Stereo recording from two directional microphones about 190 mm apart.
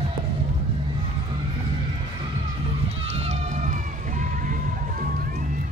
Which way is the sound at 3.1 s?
35° right (ahead or behind).